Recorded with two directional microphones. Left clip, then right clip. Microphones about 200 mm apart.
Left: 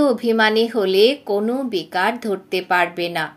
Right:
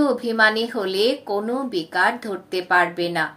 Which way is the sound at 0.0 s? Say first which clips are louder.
Left 1 dB; 45° left (ahead or behind).